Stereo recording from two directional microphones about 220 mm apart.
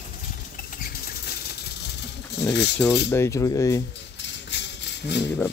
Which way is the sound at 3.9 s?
55° left (ahead or behind).